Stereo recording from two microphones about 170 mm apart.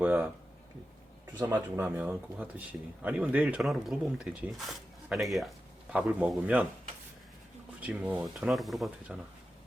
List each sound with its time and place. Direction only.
0.0 s speech: 10° right (ahead or behind)
1.4 s speech: 15° right (ahead or behind)
7.8 s speech: 10° right (ahead or behind)